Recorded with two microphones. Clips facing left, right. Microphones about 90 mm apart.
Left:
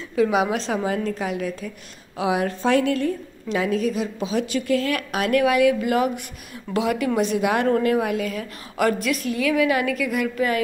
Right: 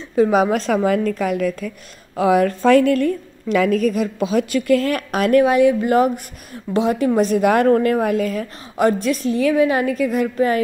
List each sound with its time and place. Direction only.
0.1 s a woman's voice: 40° right (ahead or behind)
7.2 s a woman's voice: 45° right (ahead or behind)
8.7 s a woman's voice: 30° right (ahead or behind)